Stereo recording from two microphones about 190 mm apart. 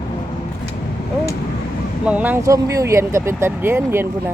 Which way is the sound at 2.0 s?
10° right (ahead or behind).